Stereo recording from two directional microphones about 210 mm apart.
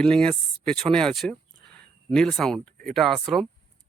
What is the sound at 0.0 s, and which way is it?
Speech, 5° left (ahead or behind).